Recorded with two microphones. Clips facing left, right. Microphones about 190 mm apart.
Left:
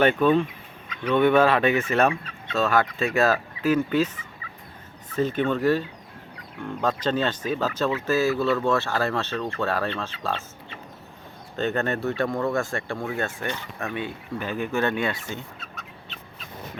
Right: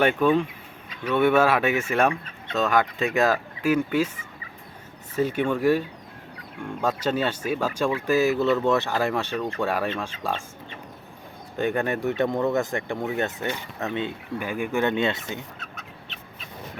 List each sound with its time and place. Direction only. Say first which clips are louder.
0.0 s speech: left 1 dB; 10° right (ahead or behind)
5.1 s speech: even; 10° right (ahead or behind)
6.8 s speech: even; 10° right (ahead or behind)
11.5 s speech: right 1 dB; 10° right (ahead or behind)
15.5 s chicken: even; centre (ahead or behind)